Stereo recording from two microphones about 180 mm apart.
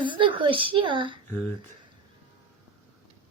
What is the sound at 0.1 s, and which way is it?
Speech, 25° right (ahead or behind).